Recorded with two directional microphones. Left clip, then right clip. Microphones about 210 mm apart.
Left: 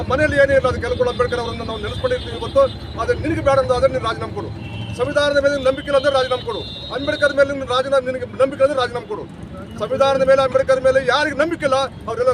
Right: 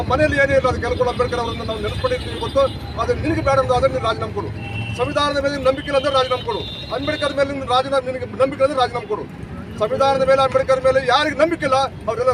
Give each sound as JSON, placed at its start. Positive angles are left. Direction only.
{"t": 0.1, "sound": "a man's voice", "side_deg": 5}
{"t": 3.0, "sound": "a man's voice", "side_deg": 5}